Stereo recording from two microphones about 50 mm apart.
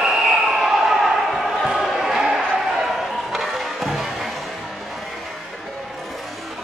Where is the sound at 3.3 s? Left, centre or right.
Centre.